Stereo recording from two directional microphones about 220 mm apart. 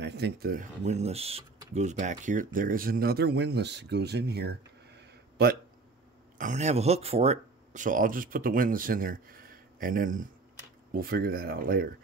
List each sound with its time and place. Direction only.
0.0 s speech: 50° right (ahead or behind)
6.3 s speech: 35° right (ahead or behind)